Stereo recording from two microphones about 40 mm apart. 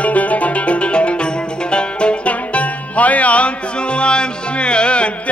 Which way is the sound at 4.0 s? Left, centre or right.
Left.